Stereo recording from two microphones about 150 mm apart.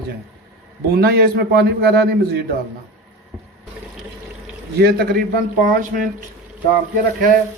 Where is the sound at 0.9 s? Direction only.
90° right.